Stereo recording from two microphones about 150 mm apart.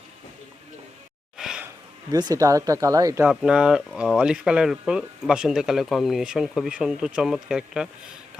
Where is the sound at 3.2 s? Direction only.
5° right (ahead or behind).